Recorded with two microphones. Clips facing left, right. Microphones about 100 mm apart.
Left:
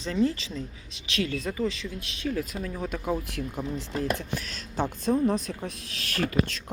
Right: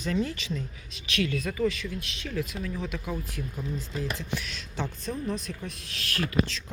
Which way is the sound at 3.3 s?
70° left (ahead or behind).